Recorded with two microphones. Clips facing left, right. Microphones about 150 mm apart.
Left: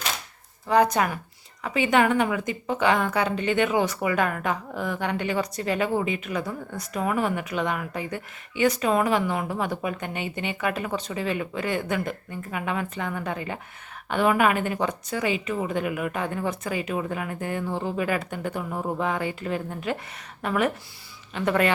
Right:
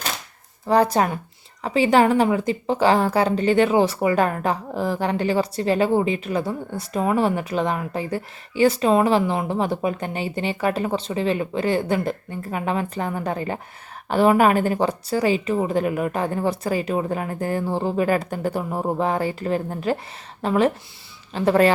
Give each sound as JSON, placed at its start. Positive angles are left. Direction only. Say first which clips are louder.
{"t": 0.6, "sound": "a woman's voice", "louder": "right 3 dB", "side_deg": -35}